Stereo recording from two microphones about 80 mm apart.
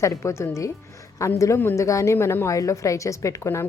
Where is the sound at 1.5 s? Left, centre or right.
Left.